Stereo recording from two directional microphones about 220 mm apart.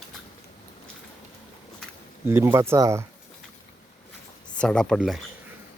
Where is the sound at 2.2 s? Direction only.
10° right (ahead or behind).